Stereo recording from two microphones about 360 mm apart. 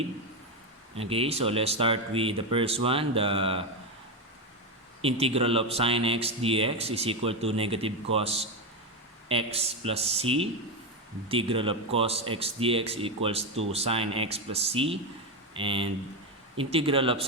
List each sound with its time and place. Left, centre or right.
0.9 s speech: centre
5.2 s speech: centre